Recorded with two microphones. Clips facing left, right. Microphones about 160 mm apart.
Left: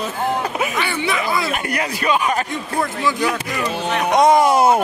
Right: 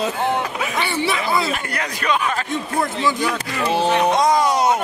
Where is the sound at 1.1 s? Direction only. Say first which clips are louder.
Left 1 dB; 25° right (ahead or behind).